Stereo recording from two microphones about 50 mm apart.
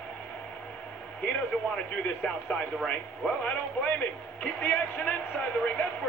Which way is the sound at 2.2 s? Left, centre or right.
Left.